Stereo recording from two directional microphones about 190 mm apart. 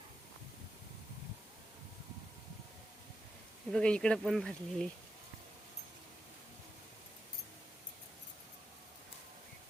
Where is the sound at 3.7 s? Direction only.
5° left (ahead or behind).